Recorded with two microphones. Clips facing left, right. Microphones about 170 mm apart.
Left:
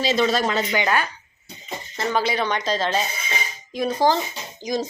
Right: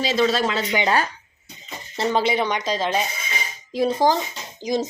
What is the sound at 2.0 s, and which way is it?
Speech, 30° right (ahead or behind).